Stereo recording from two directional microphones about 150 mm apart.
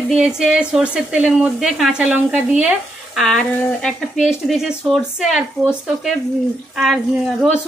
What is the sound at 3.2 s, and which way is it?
A woman's voice, 5° left (ahead or behind).